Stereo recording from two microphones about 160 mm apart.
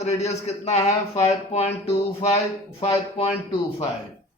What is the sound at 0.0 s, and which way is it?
A man's voice, 45° left (ahead or behind).